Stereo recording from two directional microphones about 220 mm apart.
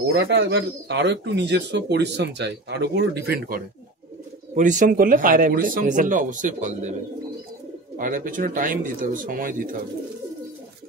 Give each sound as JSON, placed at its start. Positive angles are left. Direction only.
{"t": 0.2, "sound": "speech", "side_deg": -50}
{"t": 8.0, "sound": "speech", "side_deg": -40}